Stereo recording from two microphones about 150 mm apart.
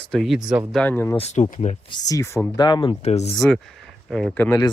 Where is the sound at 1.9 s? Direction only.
25° left (ahead or behind).